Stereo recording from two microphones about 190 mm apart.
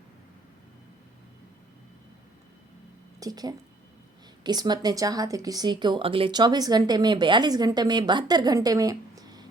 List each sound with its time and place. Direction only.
3.2 s speech: 20° right (ahead or behind)